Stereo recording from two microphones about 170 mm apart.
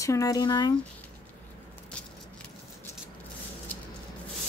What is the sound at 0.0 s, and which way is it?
Speech, 20° left (ahead or behind).